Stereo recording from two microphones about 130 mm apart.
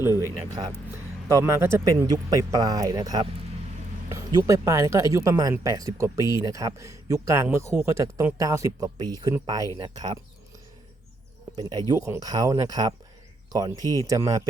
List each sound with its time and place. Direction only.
0.1 s a sound: 25° left (ahead or behind)
1.3 s speech: 20° right (ahead or behind)
11.5 s speech: 30° right (ahead or behind)